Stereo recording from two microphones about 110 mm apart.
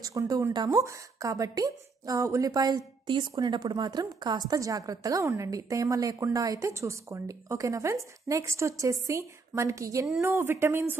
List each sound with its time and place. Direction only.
0.0 s a woman's voice: 30° right (ahead or behind)
0.8 s a woman's voice: 30° right (ahead or behind)